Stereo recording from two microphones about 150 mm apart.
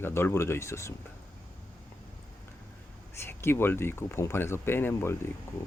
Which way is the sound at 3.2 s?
15° left (ahead or behind).